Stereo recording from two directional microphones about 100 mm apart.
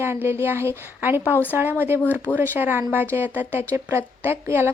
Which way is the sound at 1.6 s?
20° right (ahead or behind).